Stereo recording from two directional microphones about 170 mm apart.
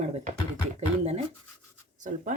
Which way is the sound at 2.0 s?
50° right (ahead or behind).